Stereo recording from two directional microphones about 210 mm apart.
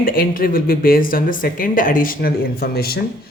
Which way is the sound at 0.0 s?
45° left (ahead or behind).